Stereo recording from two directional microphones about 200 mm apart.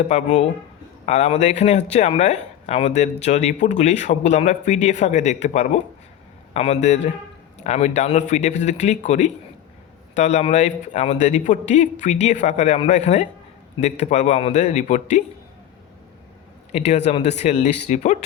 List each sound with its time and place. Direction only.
0.1 s speech: 35° left (ahead or behind)
16.7 s speech: 35° left (ahead or behind)